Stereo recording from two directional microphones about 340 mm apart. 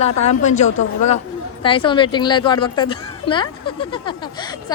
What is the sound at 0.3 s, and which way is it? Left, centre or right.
Speech, centre.